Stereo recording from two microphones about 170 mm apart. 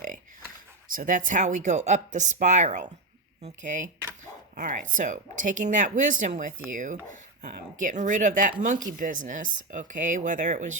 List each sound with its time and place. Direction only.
0.9 s speech: 50° right (ahead or behind)